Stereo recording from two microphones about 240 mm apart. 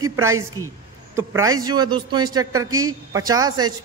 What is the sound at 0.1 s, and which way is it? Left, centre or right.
A man's voice, centre.